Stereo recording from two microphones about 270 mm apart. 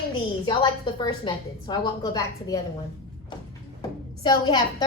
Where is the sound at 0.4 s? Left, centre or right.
Centre.